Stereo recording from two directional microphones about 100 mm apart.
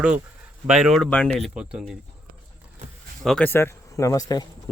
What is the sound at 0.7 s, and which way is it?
Speech, 5° right (ahead or behind).